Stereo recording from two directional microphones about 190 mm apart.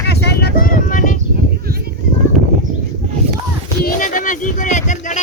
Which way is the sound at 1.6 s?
55° right (ahead or behind).